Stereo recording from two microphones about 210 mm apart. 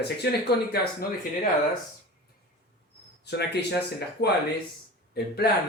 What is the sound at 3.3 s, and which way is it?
Speech, 50° left (ahead or behind).